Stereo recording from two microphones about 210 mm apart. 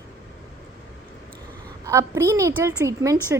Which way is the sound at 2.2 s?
15° right (ahead or behind).